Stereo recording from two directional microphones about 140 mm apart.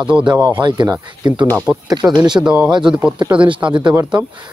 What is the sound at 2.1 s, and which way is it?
Speech, 30° right (ahead or behind).